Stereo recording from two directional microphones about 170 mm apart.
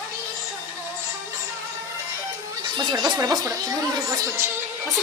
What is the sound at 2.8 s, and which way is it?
Speech, 25° right (ahead or behind).